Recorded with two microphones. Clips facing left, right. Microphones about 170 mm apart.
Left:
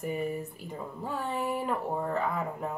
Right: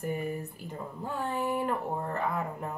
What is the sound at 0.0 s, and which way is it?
Speech, centre (ahead or behind).